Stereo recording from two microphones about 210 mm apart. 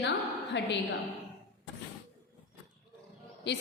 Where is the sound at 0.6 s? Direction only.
55° left (ahead or behind).